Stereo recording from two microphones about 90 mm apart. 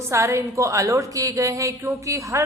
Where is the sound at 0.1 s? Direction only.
35° right (ahead or behind).